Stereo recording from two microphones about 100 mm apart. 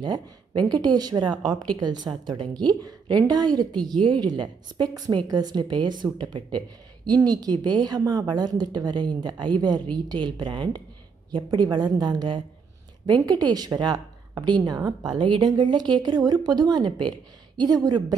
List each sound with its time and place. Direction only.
0.7 s a woman's voice: 45° right (ahead or behind)
3.7 s a woman's voice: 5° left (ahead or behind)
4.0 s speech: 50° right (ahead or behind)